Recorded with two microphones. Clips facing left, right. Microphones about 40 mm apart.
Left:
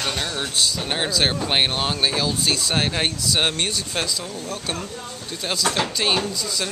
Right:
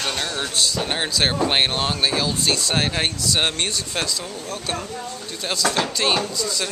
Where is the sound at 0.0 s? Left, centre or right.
Centre.